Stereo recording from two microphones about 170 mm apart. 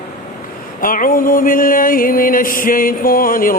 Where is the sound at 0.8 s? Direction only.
55° left (ahead or behind).